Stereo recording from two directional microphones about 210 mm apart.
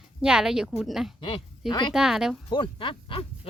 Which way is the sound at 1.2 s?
20° left (ahead or behind).